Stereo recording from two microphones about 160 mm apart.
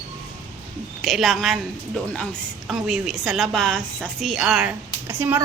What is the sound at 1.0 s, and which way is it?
Speech, centre (ahead or behind).